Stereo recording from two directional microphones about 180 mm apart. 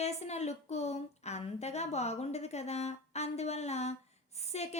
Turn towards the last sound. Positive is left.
turn(degrees=35)  # may be behind; listen again after turning